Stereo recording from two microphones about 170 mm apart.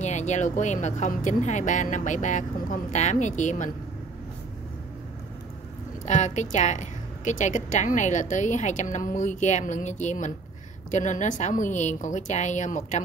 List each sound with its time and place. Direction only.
0.0 s a woman's voice: 45° left (ahead or behind)
6.0 s a woman's voice: 45° left (ahead or behind)